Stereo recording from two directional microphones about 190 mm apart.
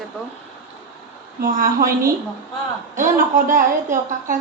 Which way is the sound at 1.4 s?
50° right (ahead or behind).